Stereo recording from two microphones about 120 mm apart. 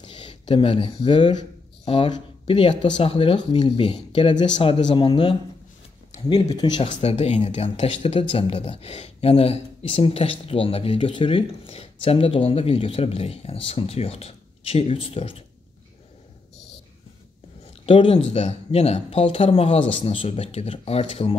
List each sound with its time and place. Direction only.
0.0 s speech: 45° left (ahead or behind)
6.8 s speech: 60° left (ahead or behind)
17.8 s speech: 45° left (ahead or behind)